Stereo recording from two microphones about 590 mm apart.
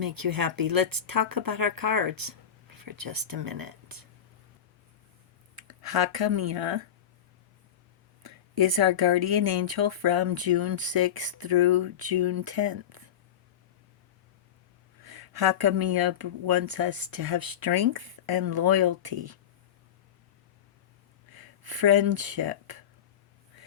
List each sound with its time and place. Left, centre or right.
0.0 s speech: right
5.5 s speech: right
8.2 s speech: right
15.0 s speech: right
21.2 s speech: right